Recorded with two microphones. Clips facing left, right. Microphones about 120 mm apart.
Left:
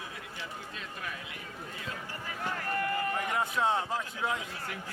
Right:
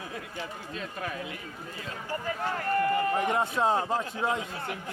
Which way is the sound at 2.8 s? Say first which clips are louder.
Right 7 dB; 25° right (ahead or behind).